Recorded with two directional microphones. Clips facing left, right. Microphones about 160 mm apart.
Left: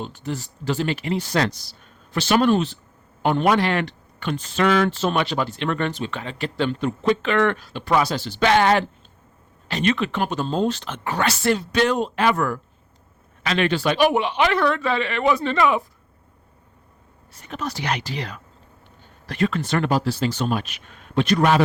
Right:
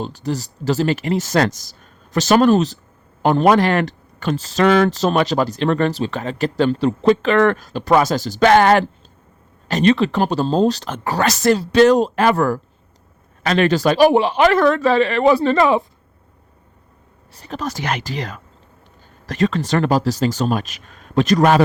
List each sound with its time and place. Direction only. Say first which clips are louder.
0.0 s speech: right 5 dB; 35° right (ahead or behind)
9.6 s speech: right 7 dB; 40° right (ahead or behind)
17.3 s speech: right 4 dB; 35° right (ahead or behind)